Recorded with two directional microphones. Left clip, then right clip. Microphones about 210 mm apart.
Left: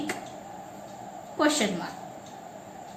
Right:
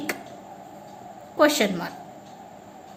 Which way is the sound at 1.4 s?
55° right (ahead or behind).